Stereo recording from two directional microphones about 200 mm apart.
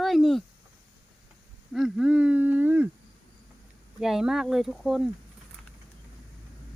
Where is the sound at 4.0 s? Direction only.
Centre (ahead or behind).